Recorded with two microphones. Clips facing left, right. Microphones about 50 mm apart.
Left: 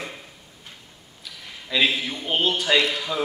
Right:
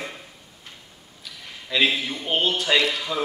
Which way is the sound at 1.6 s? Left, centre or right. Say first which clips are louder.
Even; centre.